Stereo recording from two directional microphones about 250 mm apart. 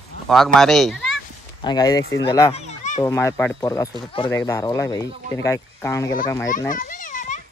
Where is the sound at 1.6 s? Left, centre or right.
Centre.